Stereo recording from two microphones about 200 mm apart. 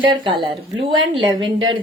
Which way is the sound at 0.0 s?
25° right (ahead or behind).